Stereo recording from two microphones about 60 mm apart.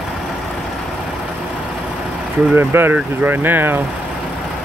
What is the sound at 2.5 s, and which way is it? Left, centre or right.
Speech, right.